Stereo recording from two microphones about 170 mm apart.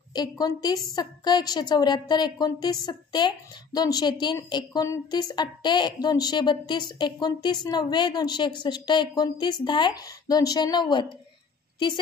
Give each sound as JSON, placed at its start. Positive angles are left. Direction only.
{"t": 0.1, "sound": "a woman's voice", "side_deg": 25}